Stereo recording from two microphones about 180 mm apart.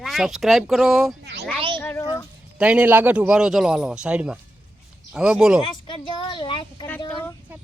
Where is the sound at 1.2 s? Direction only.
70° right (ahead or behind).